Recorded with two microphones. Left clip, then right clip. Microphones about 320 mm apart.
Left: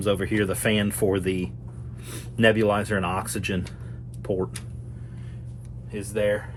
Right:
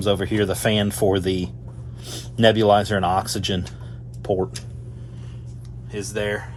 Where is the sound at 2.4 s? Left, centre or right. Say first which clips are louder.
Right 5 dB; centre.